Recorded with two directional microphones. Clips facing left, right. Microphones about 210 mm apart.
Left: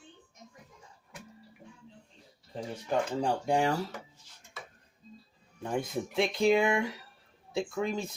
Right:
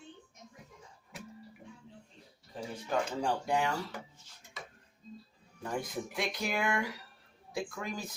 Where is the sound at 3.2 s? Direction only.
35° left (ahead or behind).